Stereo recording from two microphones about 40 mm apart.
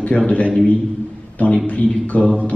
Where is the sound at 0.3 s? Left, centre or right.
Left.